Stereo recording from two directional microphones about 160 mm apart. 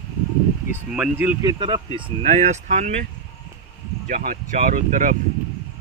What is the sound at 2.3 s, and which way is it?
Speech, 45° right (ahead or behind).